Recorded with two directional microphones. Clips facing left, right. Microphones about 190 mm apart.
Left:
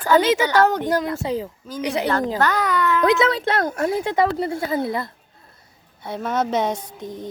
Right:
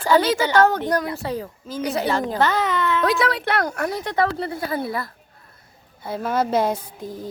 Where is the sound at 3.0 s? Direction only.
20° left (ahead or behind).